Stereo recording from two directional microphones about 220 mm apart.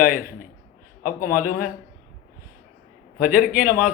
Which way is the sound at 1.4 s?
40° left (ahead or behind).